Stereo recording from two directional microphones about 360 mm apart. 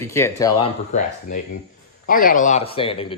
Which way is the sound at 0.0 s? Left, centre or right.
Centre.